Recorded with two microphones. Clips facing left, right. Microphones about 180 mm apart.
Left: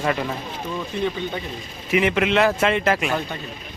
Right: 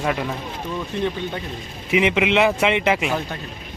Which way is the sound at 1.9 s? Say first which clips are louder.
Right 1 dB; 20° right (ahead or behind).